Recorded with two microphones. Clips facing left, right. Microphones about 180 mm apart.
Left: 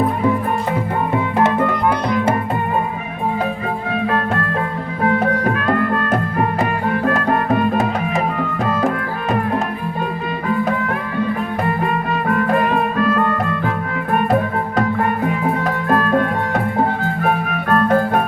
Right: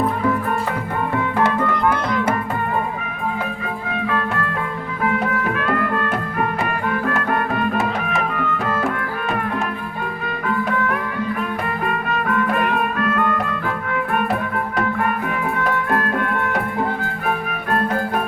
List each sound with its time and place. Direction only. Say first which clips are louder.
1.1 s music: left 3 dB; 20° left (ahead or behind)
5.0 s music: left 4 dB; 35° left (ahead or behind)
12.0 s music: left 1 dB; 30° left (ahead or behind)
15.9 s music: left 5 dB; 35° left (ahead or behind)
17.2 s music: left 4 dB; 45° left (ahead or behind)